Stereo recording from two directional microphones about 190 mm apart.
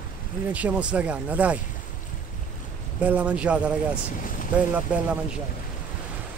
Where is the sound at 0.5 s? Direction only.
5° right (ahead or behind).